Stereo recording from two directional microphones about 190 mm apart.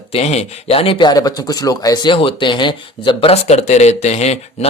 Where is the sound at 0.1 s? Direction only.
35° left (ahead or behind).